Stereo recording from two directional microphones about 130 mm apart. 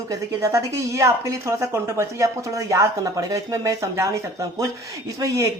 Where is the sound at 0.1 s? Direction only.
25° right (ahead or behind).